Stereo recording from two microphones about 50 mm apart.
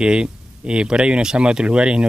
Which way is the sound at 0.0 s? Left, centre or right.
Centre.